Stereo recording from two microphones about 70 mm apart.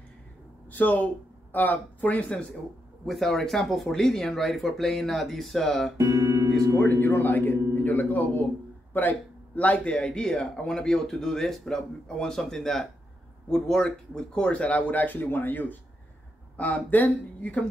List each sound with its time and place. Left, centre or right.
0.7 s speech: left
3.1 s speech: centre
5.9 s speech: right
6.9 s speech: left
9.6 s speech: centre